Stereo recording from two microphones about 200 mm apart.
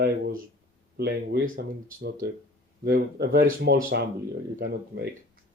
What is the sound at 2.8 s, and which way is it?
Speech, 50° right (ahead or behind).